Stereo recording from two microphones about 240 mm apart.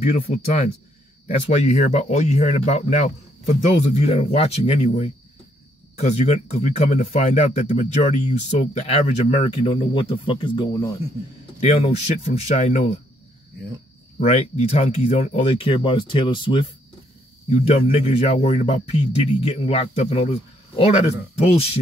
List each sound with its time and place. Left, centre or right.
0.0 s speech: left
11.6 s speech: left
14.2 s speech: left